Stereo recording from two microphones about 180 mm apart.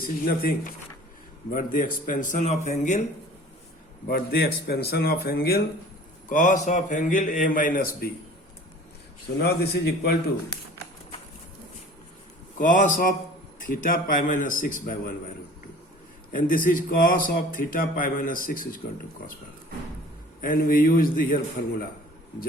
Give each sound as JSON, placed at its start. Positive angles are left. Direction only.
{"t": 0.0, "sound": "a man's voice", "side_deg": 50}
{"t": 4.1, "sound": "speech", "side_deg": 60}
{"t": 6.2, "sound": "a man's voice", "side_deg": 45}
{"t": 9.4, "sound": "speech", "side_deg": 60}
{"t": 12.5, "sound": "a man's voice", "side_deg": 45}
{"t": 16.3, "sound": "a man's voice", "side_deg": 50}
{"t": 20.4, "sound": "a man's voice", "side_deg": 50}